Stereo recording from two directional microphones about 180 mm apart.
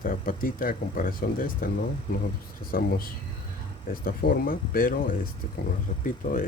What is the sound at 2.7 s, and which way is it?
Speech, 55° left (ahead or behind).